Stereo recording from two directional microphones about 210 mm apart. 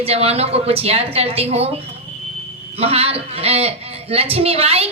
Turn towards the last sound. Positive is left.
turn(degrees=-30)  # may be behind; listen again after turning